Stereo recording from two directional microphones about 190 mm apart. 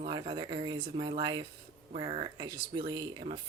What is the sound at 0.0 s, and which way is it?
Speech, 25° right (ahead or behind).